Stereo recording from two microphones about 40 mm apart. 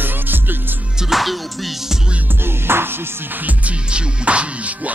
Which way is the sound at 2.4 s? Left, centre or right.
Right.